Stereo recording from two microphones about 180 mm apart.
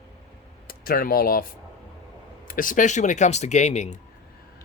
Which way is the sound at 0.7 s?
50° left (ahead or behind).